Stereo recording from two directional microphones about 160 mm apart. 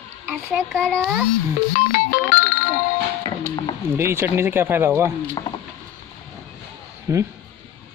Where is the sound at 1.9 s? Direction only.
55° left (ahead or behind).